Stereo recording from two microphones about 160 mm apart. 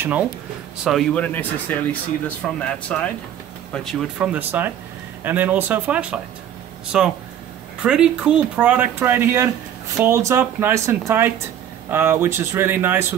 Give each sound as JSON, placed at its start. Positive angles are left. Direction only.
{"t": 0.0, "sound": "speech", "side_deg": -10}
{"t": 0.8, "sound": "speech", "side_deg": 5}